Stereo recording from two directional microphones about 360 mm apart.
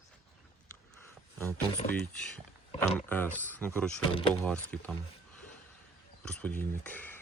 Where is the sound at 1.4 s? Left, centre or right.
Centre.